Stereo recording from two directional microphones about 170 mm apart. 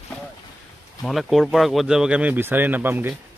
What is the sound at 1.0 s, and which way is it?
Speech, centre (ahead or behind).